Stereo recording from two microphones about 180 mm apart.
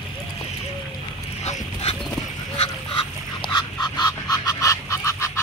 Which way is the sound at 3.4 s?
25° left (ahead or behind).